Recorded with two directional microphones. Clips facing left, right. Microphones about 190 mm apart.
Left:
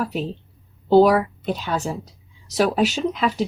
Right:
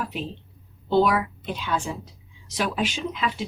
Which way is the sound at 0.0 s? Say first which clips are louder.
Left 6 dB; 40° left (ahead or behind).